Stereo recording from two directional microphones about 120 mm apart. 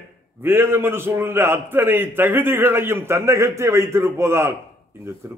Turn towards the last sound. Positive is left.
turn(degrees=-20)  # may be behind; listen again after turning